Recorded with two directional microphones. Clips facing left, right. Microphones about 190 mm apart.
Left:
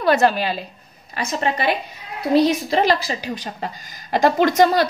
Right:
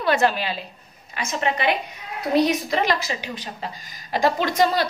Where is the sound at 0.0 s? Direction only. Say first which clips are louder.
Left 4 dB; 40° left (ahead or behind).